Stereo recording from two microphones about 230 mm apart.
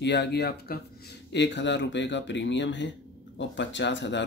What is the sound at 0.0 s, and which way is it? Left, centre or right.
Speech, left.